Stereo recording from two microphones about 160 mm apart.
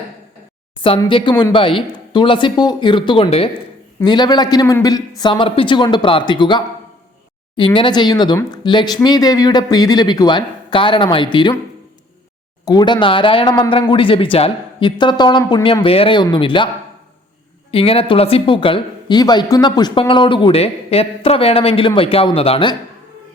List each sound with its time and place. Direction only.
0.8 s speech: 30° left (ahead or behind)
4.0 s a man's voice: 25° left (ahead or behind)
12.6 s speech: 25° left (ahead or behind)
17.7 s speech: 35° left (ahead or behind)